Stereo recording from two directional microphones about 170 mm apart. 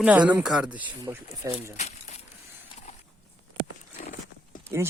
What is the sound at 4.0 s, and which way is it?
Horse, 45° left (ahead or behind).